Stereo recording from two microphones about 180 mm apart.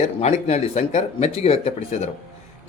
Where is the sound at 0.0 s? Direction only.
40° left (ahead or behind).